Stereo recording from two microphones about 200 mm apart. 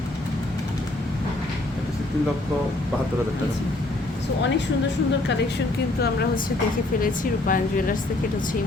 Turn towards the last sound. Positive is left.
turn(degrees=45)  # may be behind; listen again after turning